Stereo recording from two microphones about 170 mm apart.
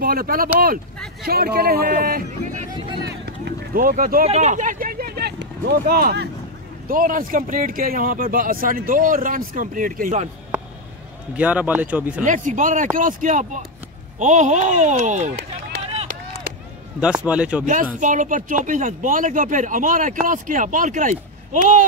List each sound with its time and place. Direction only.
0.0 s speech: 60° right (ahead or behind)
3.3 s vehicle: 60° right (ahead or behind)
4.3 s vehicle: 45° right (ahead or behind); by 6.3 s 70° right (ahead or behind)
6.9 s speech: 55° right (ahead or behind)
11.3 s speech: 10° right (ahead or behind)
12.2 s speech: 50° right (ahead or behind)
17.0 s speech: 5° right (ahead or behind)
18.0 s speech: 50° right (ahead or behind)